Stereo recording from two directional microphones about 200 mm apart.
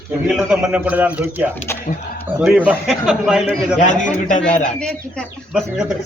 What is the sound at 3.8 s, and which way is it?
Speech, 35° left (ahead or behind).